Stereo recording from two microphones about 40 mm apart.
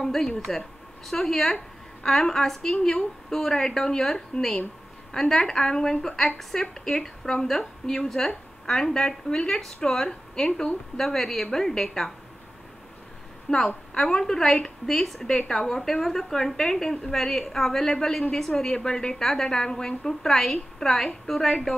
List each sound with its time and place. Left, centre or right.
0.0 s a woman's voice: centre
13.5 s a woman's voice: left
18.8 s a woman's voice: centre